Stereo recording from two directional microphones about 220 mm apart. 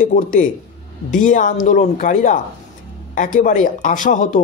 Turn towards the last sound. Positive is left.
turn(degrees=35)  # may be behind; listen again after turning